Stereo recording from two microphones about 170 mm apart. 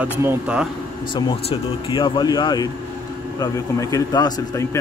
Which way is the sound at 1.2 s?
25° left (ahead or behind).